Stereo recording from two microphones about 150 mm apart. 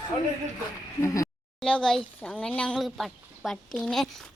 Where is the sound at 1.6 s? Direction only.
5° left (ahead or behind).